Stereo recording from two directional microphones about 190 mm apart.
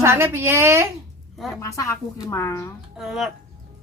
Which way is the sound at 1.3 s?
Centre (ahead or behind).